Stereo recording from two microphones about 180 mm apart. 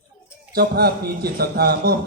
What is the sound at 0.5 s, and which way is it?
A man's voice, 60° right (ahead or behind).